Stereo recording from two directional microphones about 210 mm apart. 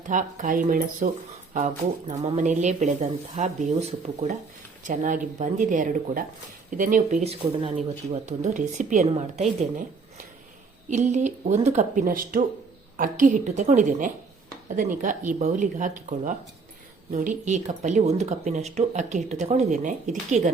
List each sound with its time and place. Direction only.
0.1 s speech: 40° right (ahead or behind)
10.8 s speech: 35° right (ahead or behind)